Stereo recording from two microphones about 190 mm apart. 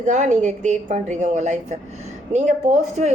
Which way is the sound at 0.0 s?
40° right (ahead or behind).